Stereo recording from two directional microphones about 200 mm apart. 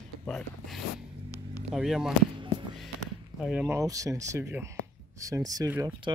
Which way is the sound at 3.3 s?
5° right (ahead or behind).